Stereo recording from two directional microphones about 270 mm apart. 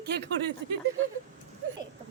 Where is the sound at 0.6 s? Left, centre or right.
Right.